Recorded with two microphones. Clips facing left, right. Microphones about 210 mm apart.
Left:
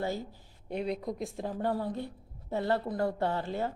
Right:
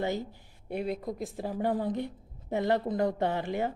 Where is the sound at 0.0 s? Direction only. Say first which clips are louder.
Right 2 dB; 20° right (ahead or behind).